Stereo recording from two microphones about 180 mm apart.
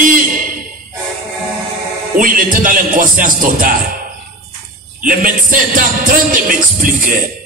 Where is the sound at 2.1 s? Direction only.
50° right (ahead or behind).